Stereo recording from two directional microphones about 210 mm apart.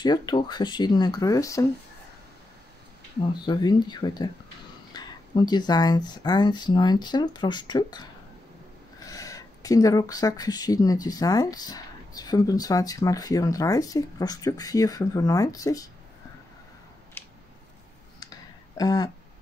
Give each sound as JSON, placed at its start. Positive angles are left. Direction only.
{"t": 0.0, "sound": "speech", "side_deg": 20}
{"t": 3.4, "sound": "speech", "side_deg": 20}
{"t": 17.2, "sound": "a sound", "side_deg": 10}
{"t": 18.8, "sound": "speech", "side_deg": 20}